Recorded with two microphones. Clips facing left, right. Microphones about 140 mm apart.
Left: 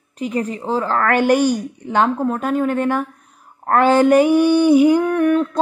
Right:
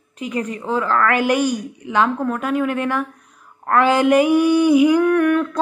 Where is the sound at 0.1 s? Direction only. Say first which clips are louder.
Left 2 dB; 35° left (ahead or behind).